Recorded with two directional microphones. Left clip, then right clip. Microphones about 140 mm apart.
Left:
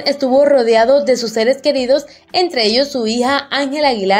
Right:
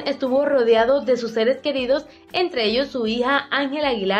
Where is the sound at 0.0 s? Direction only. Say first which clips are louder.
Left 8 dB; 35° left (ahead or behind).